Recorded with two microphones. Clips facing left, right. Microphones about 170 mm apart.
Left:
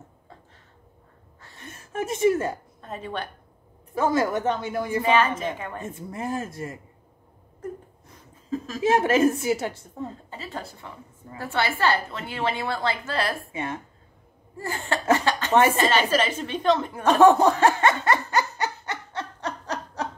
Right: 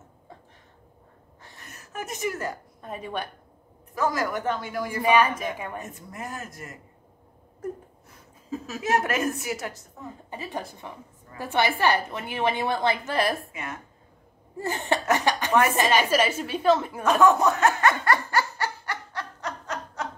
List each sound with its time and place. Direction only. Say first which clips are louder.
1.6 s a sound: left 6 dB; 25° left (ahead or behind)
2.8 s a woman's voice: right 1 dB; 10° right (ahead or behind)
3.9 s a woman's voice: left 4 dB; 25° left (ahead or behind)
5.0 s a woman's voice: right 2 dB; 10° right (ahead or behind)
5.8 s a woman's voice: left 4 dB; 25° left (ahead or behind)
8.5 s chuckle: left 3 dB; 5° right (ahead or behind)
8.8 s a woman's voice: left 6 dB; 30° left (ahead or behind)
10.3 s a woman's voice: right 2 dB; 15° right (ahead or behind)
13.4 s a woman's voice: left 5 dB; 30° left (ahead or behind)
14.6 s cough: right 2 dB; 20° right (ahead or behind)
15.1 s a woman's voice: left 3 dB; 15° right (ahead or behind)
17.0 s laughter: left 5 dB; 30° left (ahead or behind)